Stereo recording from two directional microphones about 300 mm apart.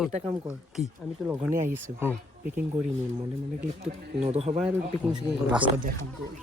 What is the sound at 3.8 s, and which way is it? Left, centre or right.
Speech, right.